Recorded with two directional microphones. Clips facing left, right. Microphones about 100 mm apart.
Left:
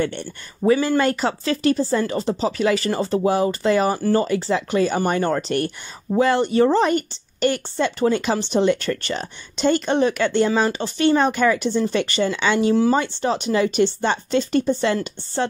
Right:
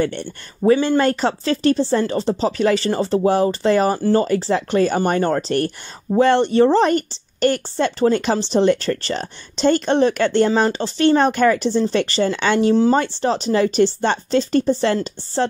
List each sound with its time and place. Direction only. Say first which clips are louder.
0.0 s speech: right 2 dB; 40° right (ahead or behind)
12.9 s speech: right 2 dB; 40° right (ahead or behind)